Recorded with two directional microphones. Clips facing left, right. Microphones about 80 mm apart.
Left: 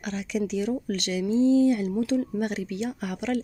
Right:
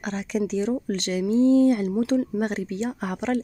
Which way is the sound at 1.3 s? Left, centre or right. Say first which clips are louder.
Right 2 dB; right.